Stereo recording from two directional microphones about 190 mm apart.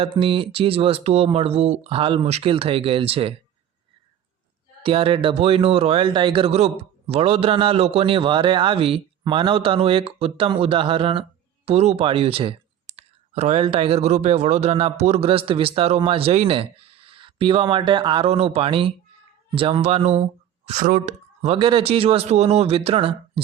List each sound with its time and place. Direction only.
0.0 s speech: 30° right (ahead or behind)
4.8 s speech: 30° right (ahead or behind)